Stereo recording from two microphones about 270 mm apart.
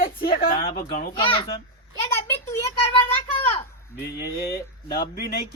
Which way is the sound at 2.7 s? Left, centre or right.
Centre.